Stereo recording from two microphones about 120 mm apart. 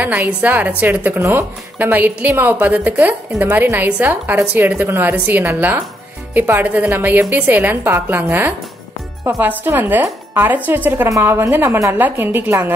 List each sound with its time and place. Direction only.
0.0 s a woman's voice: 15° right (ahead or behind)